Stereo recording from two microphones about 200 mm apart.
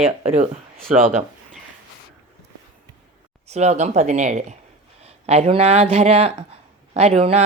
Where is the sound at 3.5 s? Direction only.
35° right (ahead or behind).